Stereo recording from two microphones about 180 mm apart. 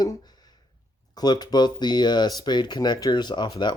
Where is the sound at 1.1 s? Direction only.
20° left (ahead or behind).